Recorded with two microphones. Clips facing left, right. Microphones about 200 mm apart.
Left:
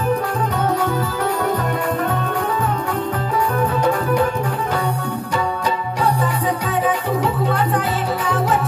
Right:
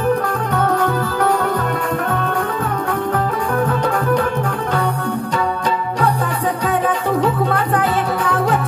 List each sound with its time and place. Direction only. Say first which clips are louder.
0.6 s music: right 3 dB; 55° right (ahead or behind)
7.5 s music: right 2 dB; 55° right (ahead or behind)